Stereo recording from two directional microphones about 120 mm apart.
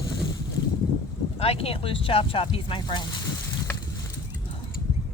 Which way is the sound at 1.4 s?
55° left (ahead or behind).